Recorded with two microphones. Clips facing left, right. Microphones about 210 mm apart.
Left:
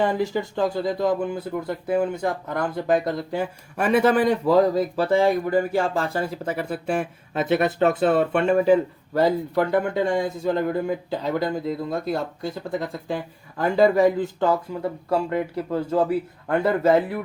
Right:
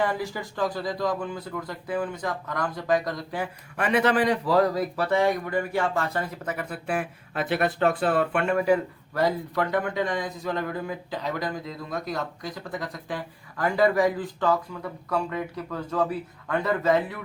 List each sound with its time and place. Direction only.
0.0 s speech: 25° left (ahead or behind)